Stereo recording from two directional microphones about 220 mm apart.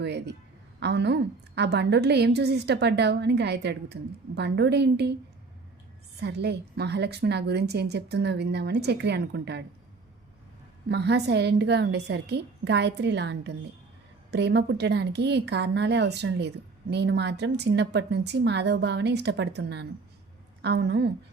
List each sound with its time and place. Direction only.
0.0 s a woman's voice: 50° right (ahead or behind)
6.1 s a woman's voice: 50° right (ahead or behind)
10.8 s a woman's voice: 50° right (ahead or behind)